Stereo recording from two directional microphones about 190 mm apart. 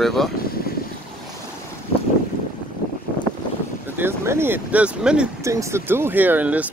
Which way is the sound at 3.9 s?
10° right (ahead or behind).